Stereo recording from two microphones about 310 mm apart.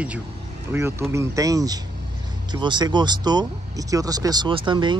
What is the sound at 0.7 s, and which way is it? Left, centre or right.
Speech, centre.